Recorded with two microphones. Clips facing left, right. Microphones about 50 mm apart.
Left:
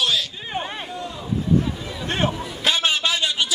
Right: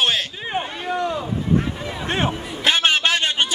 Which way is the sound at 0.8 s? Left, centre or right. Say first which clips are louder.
Right 9 dB; right.